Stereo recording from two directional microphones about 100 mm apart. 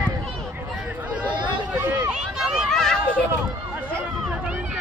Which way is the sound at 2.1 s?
5° right (ahead or behind).